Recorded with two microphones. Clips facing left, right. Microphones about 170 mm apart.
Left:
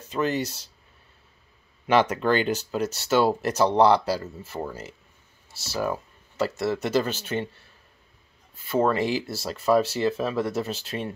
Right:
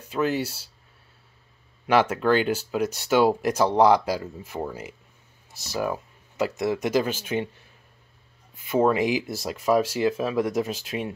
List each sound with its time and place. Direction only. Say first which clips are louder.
0.1 s speech: right 1 dB; 10° right (ahead or behind)
1.9 s speech: right 1 dB; 5° right (ahead or behind)
8.6 s speech: right 2 dB; 10° right (ahead or behind)